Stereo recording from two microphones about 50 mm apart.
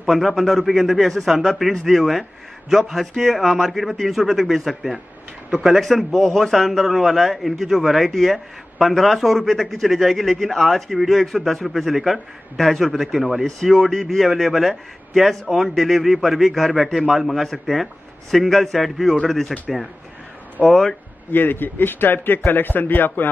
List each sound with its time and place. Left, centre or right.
0.1 s a man's voice: centre
5.8 s a man's voice: centre
20.6 s speech: centre
21.3 s a man's voice: left